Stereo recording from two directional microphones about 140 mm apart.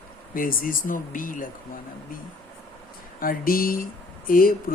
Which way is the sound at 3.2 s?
90° left.